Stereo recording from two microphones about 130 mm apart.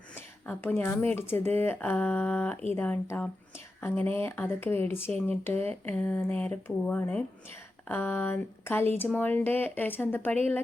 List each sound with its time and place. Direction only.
0.6 s speech: 15° left (ahead or behind)